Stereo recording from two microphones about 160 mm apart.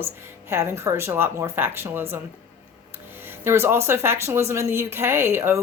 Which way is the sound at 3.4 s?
15° right (ahead or behind).